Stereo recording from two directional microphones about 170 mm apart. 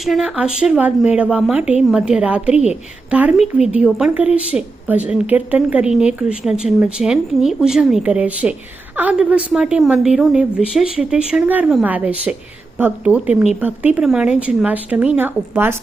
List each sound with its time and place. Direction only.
0.0 s a woman's voice: centre (ahead or behind)